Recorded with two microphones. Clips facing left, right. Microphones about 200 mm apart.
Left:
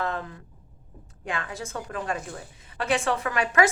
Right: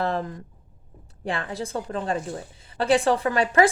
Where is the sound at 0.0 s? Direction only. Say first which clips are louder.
Right 4 dB; 35° right (ahead or behind).